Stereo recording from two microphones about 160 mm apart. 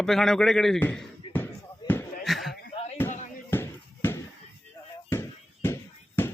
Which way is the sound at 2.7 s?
40° left (ahead or behind).